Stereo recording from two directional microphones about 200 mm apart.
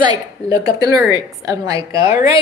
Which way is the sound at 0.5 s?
20° right (ahead or behind).